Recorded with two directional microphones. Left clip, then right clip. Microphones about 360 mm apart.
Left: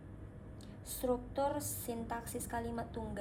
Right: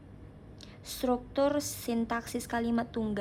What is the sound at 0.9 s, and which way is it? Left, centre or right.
A woman's voice, centre.